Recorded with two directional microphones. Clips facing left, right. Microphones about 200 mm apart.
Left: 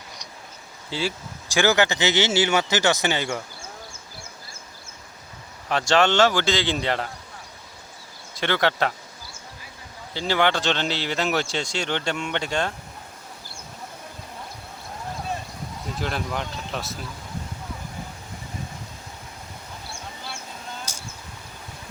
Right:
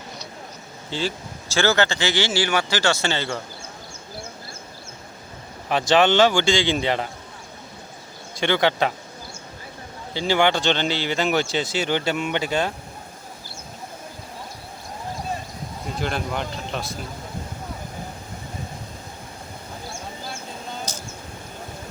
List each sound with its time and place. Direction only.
0.9 s speech: 10° left (ahead or behind)
5.6 s speech: 5° right (ahead or behind)
8.4 s speech: centre (ahead or behind)
10.2 s speech: centre (ahead or behind)
16.0 s speech: centre (ahead or behind)
20.9 s a sound: 10° left (ahead or behind)